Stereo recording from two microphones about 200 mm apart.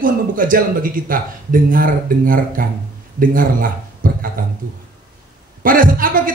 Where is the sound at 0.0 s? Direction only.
45° right (ahead or behind).